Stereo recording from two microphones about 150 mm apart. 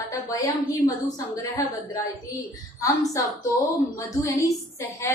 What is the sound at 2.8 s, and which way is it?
Speech, 20° left (ahead or behind).